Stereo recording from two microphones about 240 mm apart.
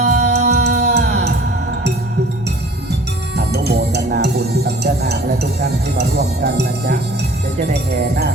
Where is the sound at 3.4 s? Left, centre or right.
Right.